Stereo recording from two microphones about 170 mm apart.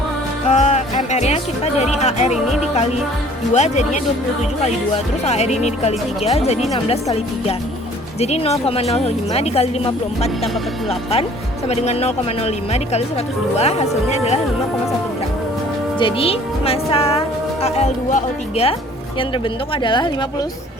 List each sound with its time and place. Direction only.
0.4 s speech: 40° left (ahead or behind)
3.5 s speech: 40° left (ahead or behind)
5.2 s speech: 40° left (ahead or behind)
11.7 s speech: 40° left (ahead or behind)
16.0 s speech: 30° left (ahead or behind)
19.3 s speech: 30° left (ahead or behind)